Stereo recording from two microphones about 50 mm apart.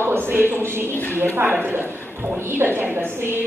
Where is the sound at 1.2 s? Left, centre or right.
Right.